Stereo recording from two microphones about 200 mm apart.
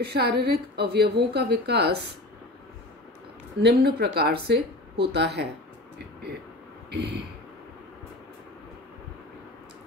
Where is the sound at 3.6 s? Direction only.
55° right (ahead or behind).